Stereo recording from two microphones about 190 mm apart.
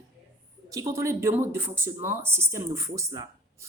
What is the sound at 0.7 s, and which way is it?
Speech, 15° right (ahead or behind).